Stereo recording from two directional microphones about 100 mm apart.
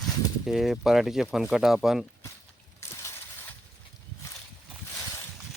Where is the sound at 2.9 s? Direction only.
25° left (ahead or behind).